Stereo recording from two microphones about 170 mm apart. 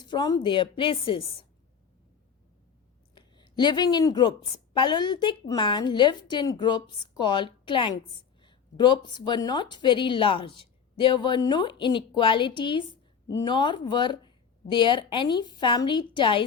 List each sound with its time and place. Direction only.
0.0 s speech: 25° left (ahead or behind)
3.2 s a woman's voice: 25° left (ahead or behind)